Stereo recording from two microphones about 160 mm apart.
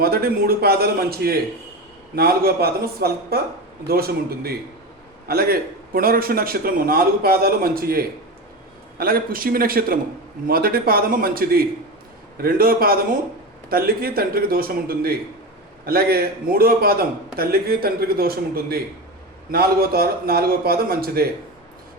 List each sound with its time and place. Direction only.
0.0 s a man's voice: 75° right (ahead or behind)